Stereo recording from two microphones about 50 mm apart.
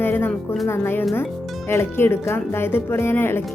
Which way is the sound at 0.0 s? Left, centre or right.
Left.